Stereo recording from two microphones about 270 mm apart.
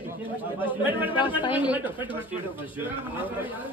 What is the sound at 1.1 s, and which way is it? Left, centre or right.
Speech, centre.